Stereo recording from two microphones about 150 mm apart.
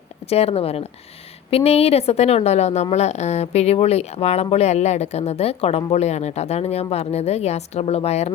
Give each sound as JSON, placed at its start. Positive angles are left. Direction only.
{"t": 0.3, "sound": "speech", "side_deg": 40}